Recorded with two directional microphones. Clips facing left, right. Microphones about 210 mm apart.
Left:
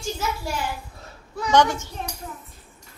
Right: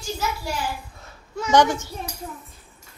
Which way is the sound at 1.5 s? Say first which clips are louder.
Right 1 dB; 10° right (ahead or behind).